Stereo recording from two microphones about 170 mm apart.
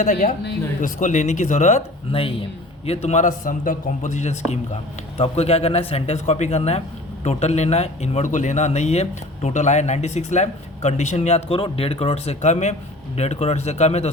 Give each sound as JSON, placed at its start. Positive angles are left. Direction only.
{"t": 0.0, "sound": "speech", "side_deg": 45}